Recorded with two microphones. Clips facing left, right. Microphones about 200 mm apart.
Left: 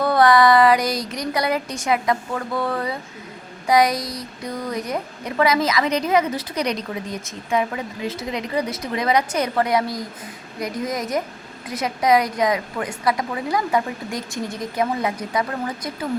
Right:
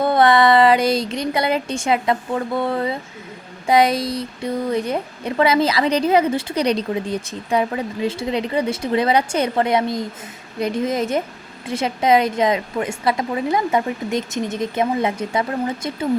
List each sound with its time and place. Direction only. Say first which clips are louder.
0.0 s a woman's voice: right 1 dB; 25° right (ahead or behind)